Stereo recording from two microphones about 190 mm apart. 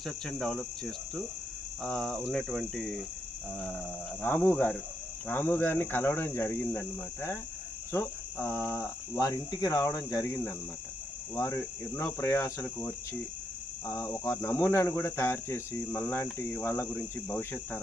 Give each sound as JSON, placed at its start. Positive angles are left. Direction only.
{"t": 0.0, "sound": "cricket", "side_deg": 5}
{"t": 4.2, "sound": "speech", "side_deg": 10}